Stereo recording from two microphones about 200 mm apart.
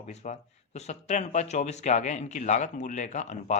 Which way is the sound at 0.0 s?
35° left (ahead or behind).